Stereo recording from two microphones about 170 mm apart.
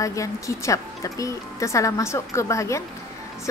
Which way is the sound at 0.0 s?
20° left (ahead or behind).